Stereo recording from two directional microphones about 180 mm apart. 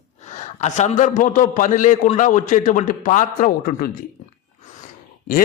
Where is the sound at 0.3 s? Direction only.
40° left (ahead or behind).